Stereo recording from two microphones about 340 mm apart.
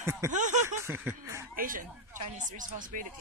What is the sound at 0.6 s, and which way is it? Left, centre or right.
Speech, centre.